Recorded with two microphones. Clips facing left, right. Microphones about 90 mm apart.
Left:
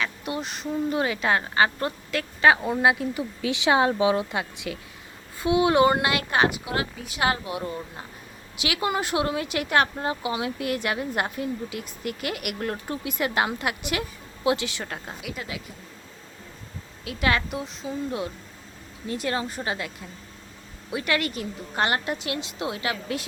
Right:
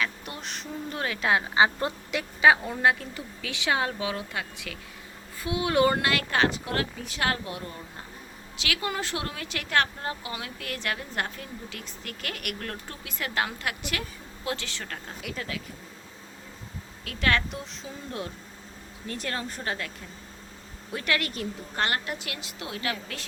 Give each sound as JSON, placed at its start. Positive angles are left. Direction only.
{"t": 0.0, "sound": "a woman's voice", "side_deg": 0}
{"t": 1.5, "sound": "a woman's voice", "side_deg": -15}
{"t": 2.4, "sound": "speech", "side_deg": 5}
{"t": 17.1, "sound": "speech", "side_deg": 10}
{"t": 19.0, "sound": "speech", "side_deg": 5}
{"t": 20.9, "sound": "speech", "side_deg": 5}
{"t": 21.8, "sound": "speech", "side_deg": 20}